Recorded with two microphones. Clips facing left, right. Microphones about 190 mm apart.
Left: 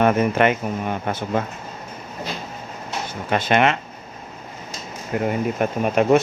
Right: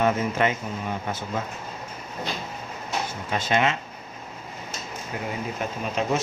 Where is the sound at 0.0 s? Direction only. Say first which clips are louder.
Left 6 dB; 65° left (ahead or behind).